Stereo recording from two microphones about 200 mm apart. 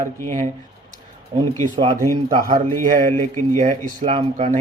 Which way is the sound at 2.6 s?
10° left (ahead or behind).